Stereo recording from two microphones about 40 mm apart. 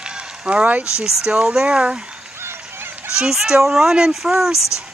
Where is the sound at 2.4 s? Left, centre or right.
Right.